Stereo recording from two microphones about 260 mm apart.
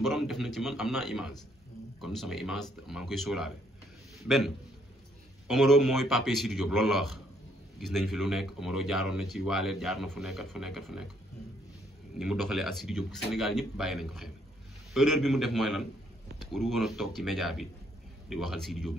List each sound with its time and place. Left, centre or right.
0.0 s speech: centre
5.5 s speech: centre
12.2 s speech: centre